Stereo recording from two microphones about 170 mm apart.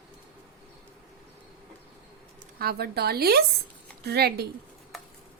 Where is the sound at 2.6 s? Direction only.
65° right (ahead or behind).